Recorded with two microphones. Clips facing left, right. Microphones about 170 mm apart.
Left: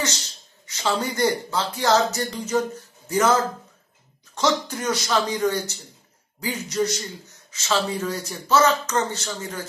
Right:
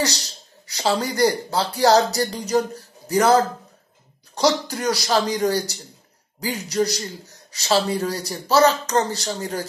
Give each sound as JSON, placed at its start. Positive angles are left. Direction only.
{"t": 0.0, "sound": "a man's voice", "side_deg": -35}